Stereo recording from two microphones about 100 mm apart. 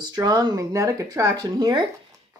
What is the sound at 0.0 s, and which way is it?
Speech, 45° right (ahead or behind).